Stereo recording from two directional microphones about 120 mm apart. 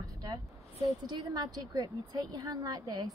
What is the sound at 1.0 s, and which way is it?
A woman's voice, 35° right (ahead or behind).